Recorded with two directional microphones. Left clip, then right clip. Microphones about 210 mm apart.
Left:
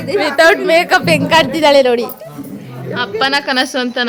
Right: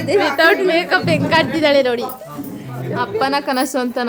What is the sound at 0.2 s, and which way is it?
A woman's voice, 25° left (ahead or behind).